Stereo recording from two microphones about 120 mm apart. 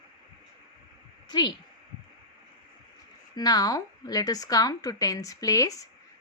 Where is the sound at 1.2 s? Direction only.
35° left (ahead or behind).